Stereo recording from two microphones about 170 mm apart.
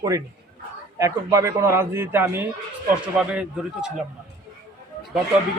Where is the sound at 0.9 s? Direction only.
20° right (ahead or behind).